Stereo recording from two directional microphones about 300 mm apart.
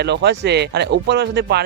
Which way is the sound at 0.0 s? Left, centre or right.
Right.